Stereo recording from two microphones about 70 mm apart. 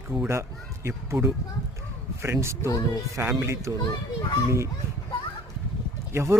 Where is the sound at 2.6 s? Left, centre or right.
Left.